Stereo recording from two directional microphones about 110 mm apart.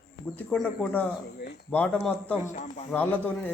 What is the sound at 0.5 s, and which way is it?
Speech, 10° left (ahead or behind).